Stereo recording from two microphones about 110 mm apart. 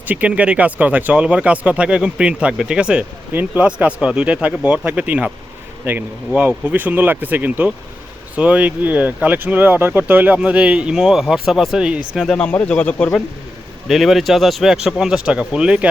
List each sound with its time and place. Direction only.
0.1 s speech: 10° right (ahead or behind)
12.4 s speech: 10° left (ahead or behind)
13.8 s speech: centre (ahead or behind)